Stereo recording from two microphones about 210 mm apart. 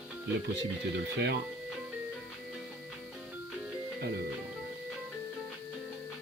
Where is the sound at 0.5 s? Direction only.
55° right (ahead or behind).